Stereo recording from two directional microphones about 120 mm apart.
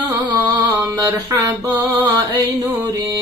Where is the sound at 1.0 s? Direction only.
30° right (ahead or behind).